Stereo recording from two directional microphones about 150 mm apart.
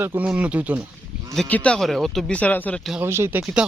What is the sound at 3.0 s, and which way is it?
Speech, 15° right (ahead or behind).